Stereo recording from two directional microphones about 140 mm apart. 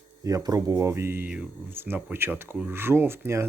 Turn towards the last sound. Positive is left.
turn(degrees=-15)  # may be behind; listen again after turning